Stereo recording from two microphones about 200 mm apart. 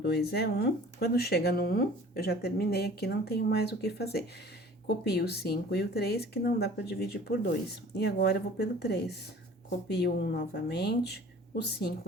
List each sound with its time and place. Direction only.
0.0 s speech: 55° left (ahead or behind)